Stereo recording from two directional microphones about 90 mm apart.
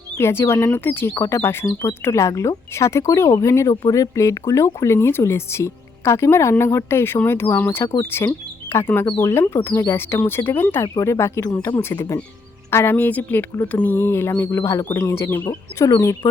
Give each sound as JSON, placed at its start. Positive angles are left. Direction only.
{"t": 0.2, "sound": "speech", "side_deg": 30}
{"t": 15.4, "sound": "speech", "side_deg": 40}